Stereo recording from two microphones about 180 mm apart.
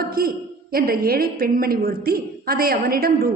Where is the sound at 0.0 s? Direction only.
55° right (ahead or behind).